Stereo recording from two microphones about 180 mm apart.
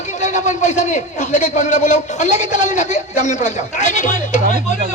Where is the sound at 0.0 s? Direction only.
40° left (ahead or behind).